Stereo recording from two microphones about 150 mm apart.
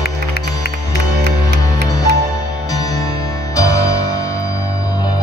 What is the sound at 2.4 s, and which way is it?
Music, 25° left (ahead or behind).